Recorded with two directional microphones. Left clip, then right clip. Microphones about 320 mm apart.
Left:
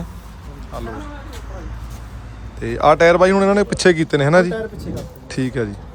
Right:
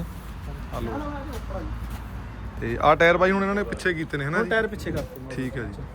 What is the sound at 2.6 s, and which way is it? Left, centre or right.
Speech, centre.